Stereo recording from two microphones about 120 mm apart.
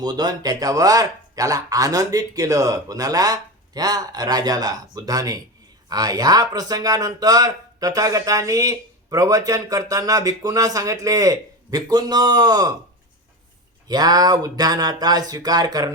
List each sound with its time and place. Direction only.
0.0 s speech: 35° right (ahead or behind)
13.8 s speech: 35° right (ahead or behind)